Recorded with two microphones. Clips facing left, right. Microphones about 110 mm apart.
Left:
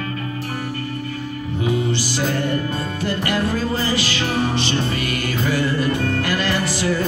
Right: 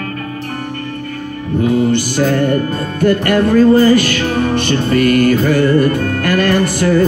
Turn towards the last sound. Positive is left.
turn(degrees=-55)  # may be behind; listen again after turning